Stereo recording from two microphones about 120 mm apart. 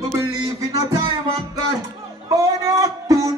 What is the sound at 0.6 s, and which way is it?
Music, 30° right (ahead or behind).